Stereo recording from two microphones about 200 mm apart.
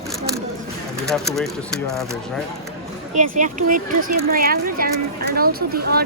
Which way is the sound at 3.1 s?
40° right (ahead or behind).